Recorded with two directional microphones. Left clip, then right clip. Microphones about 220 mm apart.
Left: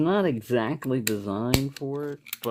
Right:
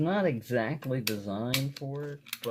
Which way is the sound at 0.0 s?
45° left (ahead or behind).